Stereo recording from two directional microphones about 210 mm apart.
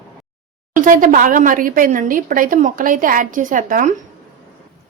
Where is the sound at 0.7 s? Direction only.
40° right (ahead or behind).